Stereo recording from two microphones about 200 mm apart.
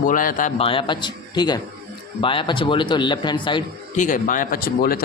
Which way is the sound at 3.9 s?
40° left (ahead or behind).